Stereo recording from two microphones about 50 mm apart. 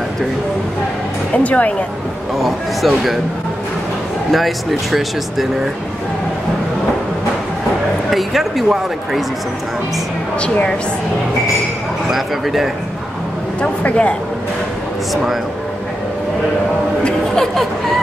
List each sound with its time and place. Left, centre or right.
1.3 s speech: left
2.4 s speech: centre
4.3 s speech: centre
8.1 s speech: centre
12.1 s speech: centre
13.6 s speech: left
17.0 s speech: centre